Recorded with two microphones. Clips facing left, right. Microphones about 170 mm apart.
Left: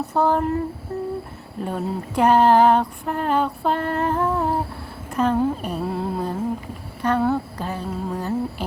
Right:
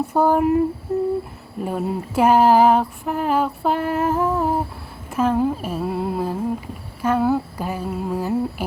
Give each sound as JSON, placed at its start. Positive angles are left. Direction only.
{"t": 0.1, "sound": "speech", "side_deg": -10}
{"t": 1.6, "sound": "a sound", "side_deg": -5}
{"t": 7.0, "sound": "humming", "side_deg": -5}